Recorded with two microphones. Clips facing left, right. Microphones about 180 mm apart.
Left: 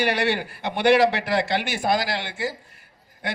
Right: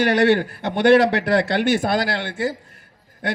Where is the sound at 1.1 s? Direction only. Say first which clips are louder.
Right 4 dB; 55° right (ahead or behind).